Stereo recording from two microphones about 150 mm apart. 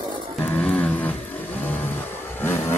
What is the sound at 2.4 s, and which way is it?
Vehicle, 15° left (ahead or behind).